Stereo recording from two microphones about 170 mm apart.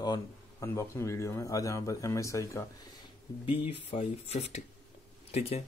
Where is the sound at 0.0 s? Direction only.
20° left (ahead or behind).